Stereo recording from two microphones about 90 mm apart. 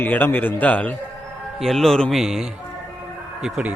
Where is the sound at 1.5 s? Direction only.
5° left (ahead or behind).